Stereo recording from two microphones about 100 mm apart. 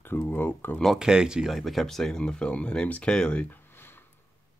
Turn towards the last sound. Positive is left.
turn(degrees=10)  # may be behind; listen again after turning